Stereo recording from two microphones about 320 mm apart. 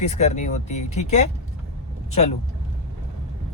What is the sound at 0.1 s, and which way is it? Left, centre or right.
Speech, left.